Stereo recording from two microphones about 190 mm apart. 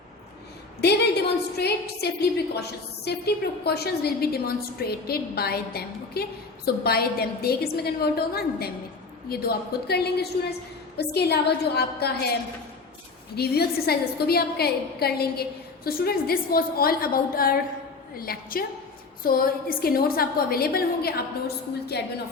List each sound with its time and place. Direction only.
0.8 s a woman's voice: 60° left (ahead or behind)
13.3 s a woman's voice: 55° left (ahead or behind)